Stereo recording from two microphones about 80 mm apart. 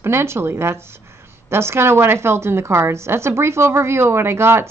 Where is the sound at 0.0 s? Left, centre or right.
Right.